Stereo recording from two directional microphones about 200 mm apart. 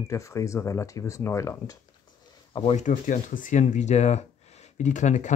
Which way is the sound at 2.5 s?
30° left (ahead or behind).